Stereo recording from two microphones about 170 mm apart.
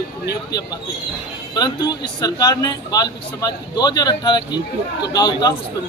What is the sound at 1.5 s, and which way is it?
Speech, 25° left (ahead or behind).